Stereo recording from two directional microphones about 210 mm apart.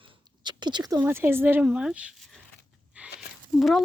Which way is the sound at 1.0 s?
10° right (ahead or behind).